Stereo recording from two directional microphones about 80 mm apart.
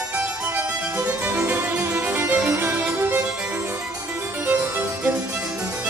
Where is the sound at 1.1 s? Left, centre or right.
Right.